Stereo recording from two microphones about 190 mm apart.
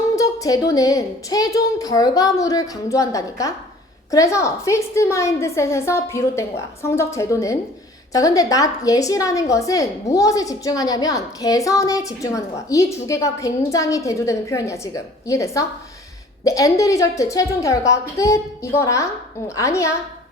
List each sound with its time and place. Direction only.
0.2 s a woman's voice: 20° left (ahead or behind)